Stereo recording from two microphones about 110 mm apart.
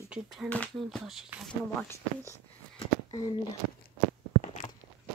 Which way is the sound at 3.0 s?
45° left (ahead or behind).